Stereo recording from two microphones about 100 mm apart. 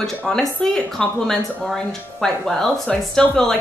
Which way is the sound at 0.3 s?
5° left (ahead or behind).